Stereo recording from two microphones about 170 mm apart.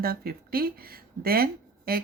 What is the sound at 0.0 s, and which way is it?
Speech, 60° right (ahead or behind).